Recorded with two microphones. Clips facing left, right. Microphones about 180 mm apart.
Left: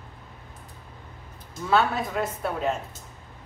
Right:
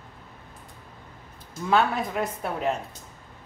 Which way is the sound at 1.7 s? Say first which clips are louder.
Even; 15° right (ahead or behind).